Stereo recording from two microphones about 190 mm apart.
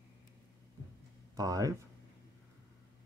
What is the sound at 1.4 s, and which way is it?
Speech, 20° right (ahead or behind).